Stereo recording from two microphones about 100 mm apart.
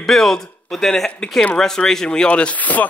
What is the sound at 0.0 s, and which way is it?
Speech, 5° left (ahead or behind).